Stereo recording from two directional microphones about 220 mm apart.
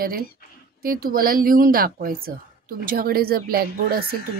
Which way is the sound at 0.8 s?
40° right (ahead or behind).